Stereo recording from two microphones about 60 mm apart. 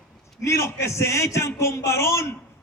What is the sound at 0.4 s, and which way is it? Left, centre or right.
A man's voice, left.